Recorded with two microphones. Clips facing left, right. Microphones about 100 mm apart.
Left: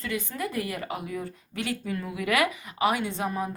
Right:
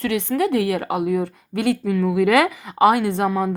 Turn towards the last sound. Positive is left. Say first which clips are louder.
# right 9 dB
turn(degrees=-85)